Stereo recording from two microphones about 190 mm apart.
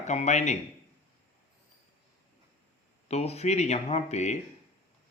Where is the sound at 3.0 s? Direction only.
35° left (ahead or behind).